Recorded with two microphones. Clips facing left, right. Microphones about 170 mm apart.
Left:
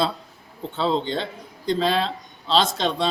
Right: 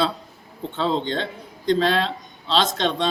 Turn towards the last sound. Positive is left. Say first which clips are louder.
# right 1 dB
turn(degrees=5)  # may be behind; listen again after turning